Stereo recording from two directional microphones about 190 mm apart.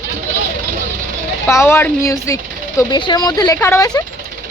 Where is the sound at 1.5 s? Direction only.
15° left (ahead or behind).